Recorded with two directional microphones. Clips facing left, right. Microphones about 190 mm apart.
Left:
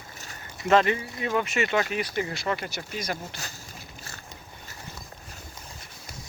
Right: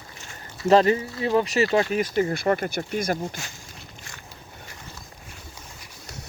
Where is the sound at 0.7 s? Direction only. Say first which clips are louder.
Right 4 dB; 35° right (ahead or behind); by 3.2 s 50° right (ahead or behind).